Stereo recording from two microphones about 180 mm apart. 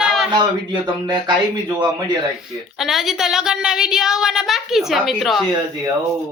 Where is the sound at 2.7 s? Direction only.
Centre (ahead or behind).